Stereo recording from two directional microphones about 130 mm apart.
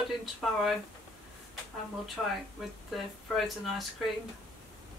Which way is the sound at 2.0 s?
Centre (ahead or behind).